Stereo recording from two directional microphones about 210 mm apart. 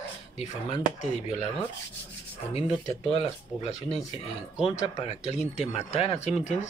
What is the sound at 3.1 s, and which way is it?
Speech, 30° left (ahead or behind).